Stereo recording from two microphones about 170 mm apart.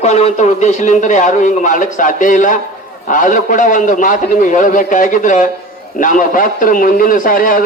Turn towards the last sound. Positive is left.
turn(degrees=55)  # may be behind; listen again after turning